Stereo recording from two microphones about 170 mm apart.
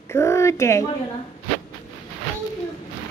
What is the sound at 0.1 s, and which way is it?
Speech, 15° left (ahead or behind).